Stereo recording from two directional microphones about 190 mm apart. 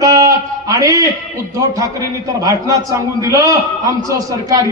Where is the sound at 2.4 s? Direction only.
15° right (ahead or behind).